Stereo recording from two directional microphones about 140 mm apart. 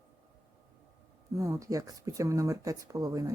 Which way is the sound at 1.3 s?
25° right (ahead or behind).